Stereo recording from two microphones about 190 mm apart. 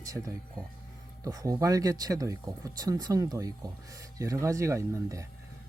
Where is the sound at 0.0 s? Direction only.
15° right (ahead or behind).